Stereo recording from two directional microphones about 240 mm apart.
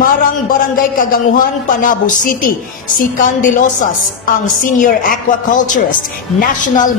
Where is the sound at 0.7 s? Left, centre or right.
Left.